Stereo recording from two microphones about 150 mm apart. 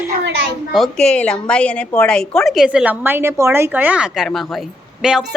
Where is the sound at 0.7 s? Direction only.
5° left (ahead or behind).